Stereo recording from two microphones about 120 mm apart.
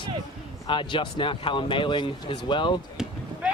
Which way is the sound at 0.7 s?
45° left (ahead or behind).